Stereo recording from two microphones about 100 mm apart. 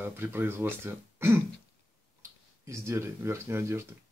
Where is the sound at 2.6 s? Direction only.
30° right (ahead or behind).